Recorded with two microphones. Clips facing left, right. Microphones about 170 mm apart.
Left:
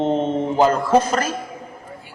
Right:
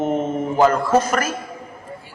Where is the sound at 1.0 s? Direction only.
30° left (ahead or behind).